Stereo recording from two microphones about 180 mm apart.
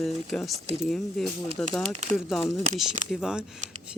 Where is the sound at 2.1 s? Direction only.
Centre (ahead or behind).